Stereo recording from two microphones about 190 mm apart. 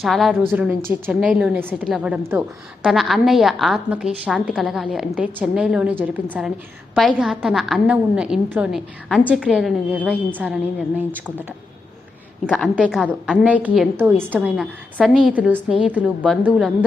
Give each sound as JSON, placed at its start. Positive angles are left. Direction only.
{"t": 0.0, "sound": "a woman's voice", "side_deg": 0}
{"t": 12.5, "sound": "a woman's voice", "side_deg": 0}